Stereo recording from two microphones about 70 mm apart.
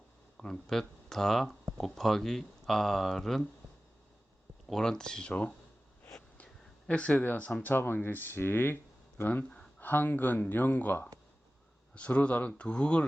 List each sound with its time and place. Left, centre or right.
0.3 s speech: centre
4.7 s speech: centre
6.3 s a sound: centre
7.7 s speech: left